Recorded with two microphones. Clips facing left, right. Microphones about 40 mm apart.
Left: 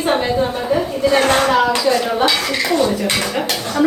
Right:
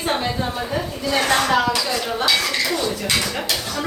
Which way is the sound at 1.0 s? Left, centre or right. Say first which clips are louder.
Left 5 dB; left.